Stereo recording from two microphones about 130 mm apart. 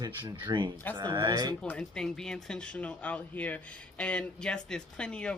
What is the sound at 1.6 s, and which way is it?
Speech, 10° left (ahead or behind).